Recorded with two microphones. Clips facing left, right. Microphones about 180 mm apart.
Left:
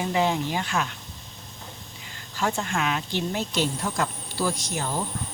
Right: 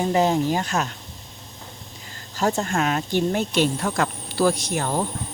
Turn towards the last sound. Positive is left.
turn(degrees=-60)  # may be behind; listen again after turning